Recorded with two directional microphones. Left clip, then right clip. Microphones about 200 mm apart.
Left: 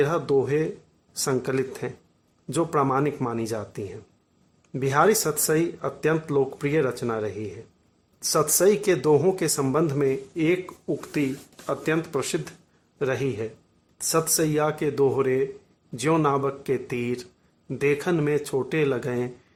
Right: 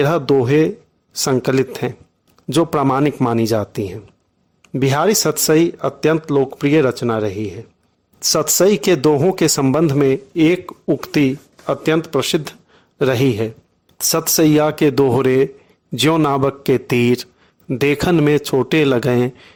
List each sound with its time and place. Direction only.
0.0 s speech: 40° right (ahead or behind)